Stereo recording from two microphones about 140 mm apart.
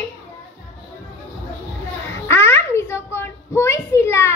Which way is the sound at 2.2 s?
20° left (ahead or behind).